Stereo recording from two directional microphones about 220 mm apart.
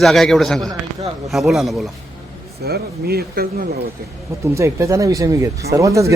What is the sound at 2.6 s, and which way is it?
A man's voice, 45° right (ahead or behind).